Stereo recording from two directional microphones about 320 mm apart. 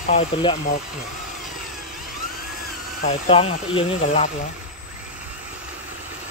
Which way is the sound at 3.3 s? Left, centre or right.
Centre.